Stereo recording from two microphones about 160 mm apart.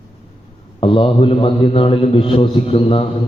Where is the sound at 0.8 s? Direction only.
35° left (ahead or behind).